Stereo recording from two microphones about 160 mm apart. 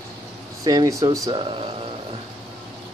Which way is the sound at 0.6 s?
25° right (ahead or behind).